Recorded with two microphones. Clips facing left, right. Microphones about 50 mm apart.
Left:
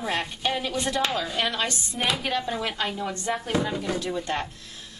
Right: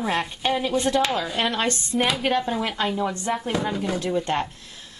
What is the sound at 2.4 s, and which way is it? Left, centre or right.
Speech, centre.